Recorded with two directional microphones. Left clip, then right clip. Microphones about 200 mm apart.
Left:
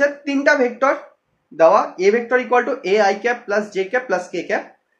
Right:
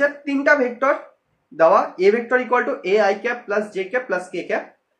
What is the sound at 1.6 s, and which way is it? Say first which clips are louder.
Speech: left 1 dB; centre (ahead or behind).